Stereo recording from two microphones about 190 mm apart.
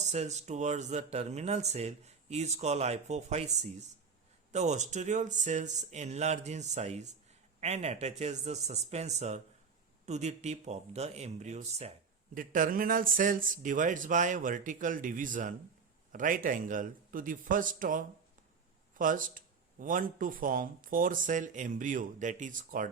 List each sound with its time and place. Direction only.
0.0 s speech: 35° right (ahead or behind)